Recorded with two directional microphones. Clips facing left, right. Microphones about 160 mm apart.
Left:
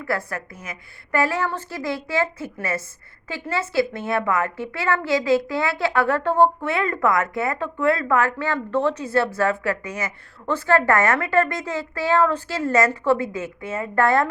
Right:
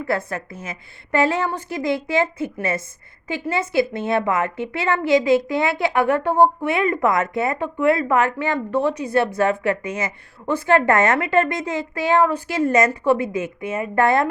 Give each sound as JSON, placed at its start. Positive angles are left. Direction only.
{"t": 0.0, "sound": "a woman's voice", "side_deg": -25}